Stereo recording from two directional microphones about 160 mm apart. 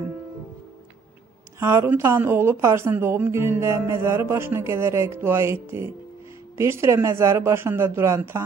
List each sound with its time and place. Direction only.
1.6 s speech: 15° right (ahead or behind)